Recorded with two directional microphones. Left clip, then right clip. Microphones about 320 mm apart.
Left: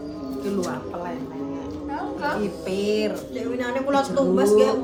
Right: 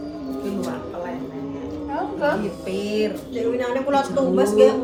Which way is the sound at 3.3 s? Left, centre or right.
Centre.